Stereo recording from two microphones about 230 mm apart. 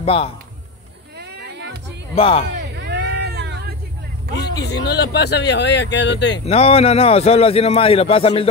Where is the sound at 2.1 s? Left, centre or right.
Left.